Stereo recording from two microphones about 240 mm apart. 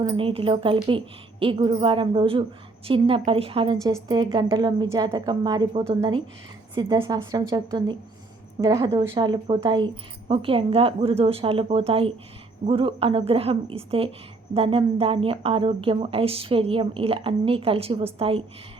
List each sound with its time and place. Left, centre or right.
0.0 s a woman's voice: centre